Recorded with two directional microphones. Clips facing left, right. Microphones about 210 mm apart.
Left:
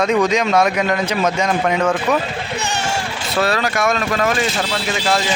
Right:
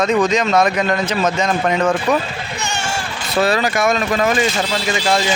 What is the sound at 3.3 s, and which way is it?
Speech, centre (ahead or behind).